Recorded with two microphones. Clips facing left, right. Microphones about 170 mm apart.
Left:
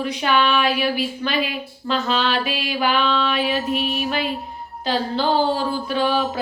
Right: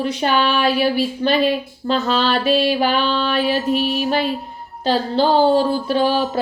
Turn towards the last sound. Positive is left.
turn(degrees=-35)  # may be behind; listen again after turning